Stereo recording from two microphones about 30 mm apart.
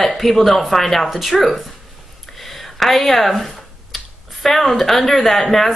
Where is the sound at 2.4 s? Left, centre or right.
Centre.